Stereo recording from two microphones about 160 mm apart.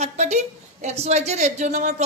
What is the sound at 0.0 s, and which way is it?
A woman's voice, 45° right (ahead or behind).